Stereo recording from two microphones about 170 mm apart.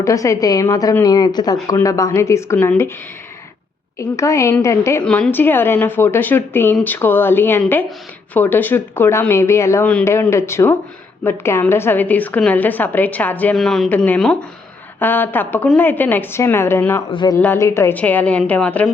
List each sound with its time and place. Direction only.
0.0 s a woman's voice: 20° left (ahead or behind)
3.9 s a woman's voice: 15° left (ahead or behind)
17.1 s a woman's voice: 30° left (ahead or behind)
17.3 s a woman's voice: 15° left (ahead or behind)